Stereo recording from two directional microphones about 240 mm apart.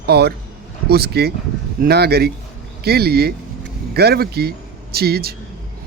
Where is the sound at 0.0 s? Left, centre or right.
Right.